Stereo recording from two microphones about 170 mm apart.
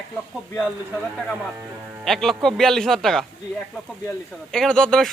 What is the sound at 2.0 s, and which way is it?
Speech, centre (ahead or behind).